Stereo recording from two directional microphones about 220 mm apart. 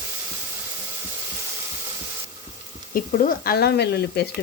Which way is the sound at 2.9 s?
40° left (ahead or behind).